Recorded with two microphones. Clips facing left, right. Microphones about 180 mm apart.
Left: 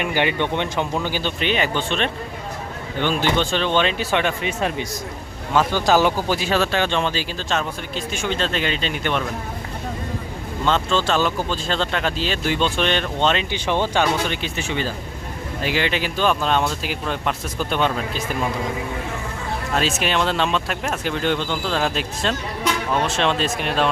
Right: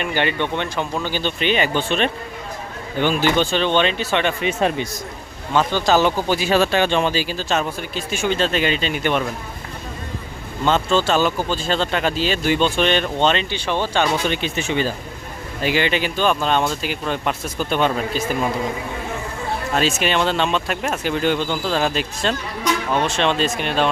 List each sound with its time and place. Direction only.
0.0 s speech: 15° left (ahead or behind)
1.2 s speech: centre (ahead or behind)
4.4 s speech: 25° right (ahead or behind)
5.5 s speech: 10° left (ahead or behind)
6.5 s speech: 10° right (ahead or behind)
10.7 s speech: 5° right (ahead or behind)
13.5 s speech: 15° left (ahead or behind)
14.3 s speech: 20° right (ahead or behind)
15.6 s speech: centre (ahead or behind)
19.7 s speech: centre (ahead or behind)